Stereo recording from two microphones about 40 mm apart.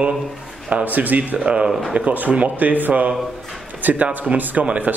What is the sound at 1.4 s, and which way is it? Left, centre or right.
Speech, right.